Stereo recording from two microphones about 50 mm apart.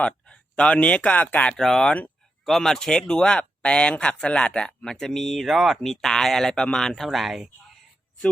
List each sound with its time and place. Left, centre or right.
0.0 s speech: centre
1.5 s speech: centre